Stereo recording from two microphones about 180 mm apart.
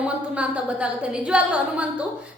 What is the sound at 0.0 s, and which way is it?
A woman's voice, 5° right (ahead or behind).